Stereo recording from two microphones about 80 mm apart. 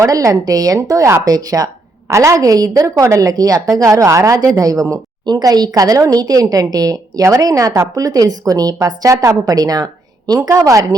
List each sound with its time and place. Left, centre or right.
0.0 s a woman's voice: right
5.2 s a woman's voice: right
10.6 s a woman's voice: right